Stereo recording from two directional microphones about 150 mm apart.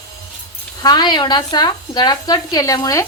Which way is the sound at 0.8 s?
25° left (ahead or behind).